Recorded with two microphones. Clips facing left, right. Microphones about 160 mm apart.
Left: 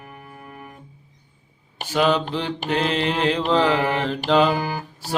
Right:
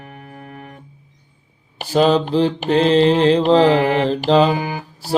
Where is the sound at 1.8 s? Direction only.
35° right (ahead or behind).